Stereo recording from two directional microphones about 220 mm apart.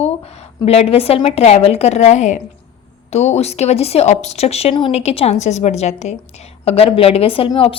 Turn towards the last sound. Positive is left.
turn(degrees=25)  # may be behind; listen again after turning